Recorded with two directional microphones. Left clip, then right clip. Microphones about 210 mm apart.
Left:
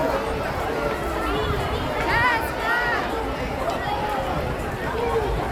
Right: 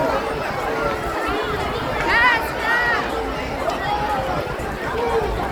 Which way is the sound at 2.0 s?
30° left (ahead or behind).